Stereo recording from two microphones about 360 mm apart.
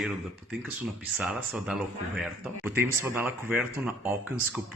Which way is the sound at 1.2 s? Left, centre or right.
Centre.